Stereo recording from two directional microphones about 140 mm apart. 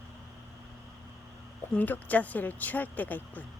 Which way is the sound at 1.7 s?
10° left (ahead or behind).